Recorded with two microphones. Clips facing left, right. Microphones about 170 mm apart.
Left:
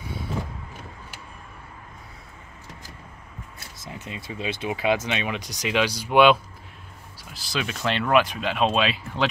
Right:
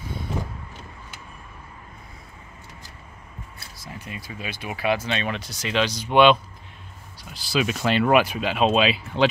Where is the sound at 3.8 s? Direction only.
20° left (ahead or behind).